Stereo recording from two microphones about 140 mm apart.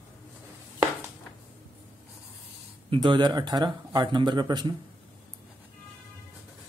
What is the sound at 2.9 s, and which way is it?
Speech, 35° right (ahead or behind).